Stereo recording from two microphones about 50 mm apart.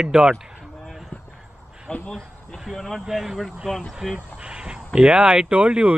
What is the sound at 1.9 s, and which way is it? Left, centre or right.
Speech, left.